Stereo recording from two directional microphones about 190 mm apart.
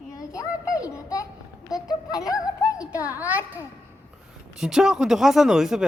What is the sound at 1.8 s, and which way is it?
Music, 20° left (ahead or behind).